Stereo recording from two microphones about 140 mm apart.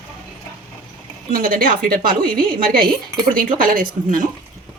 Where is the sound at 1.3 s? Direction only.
90° right.